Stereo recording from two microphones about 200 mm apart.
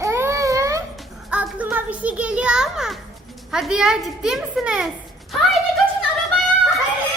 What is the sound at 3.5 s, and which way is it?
A woman's voice, 5° right (ahead or behind).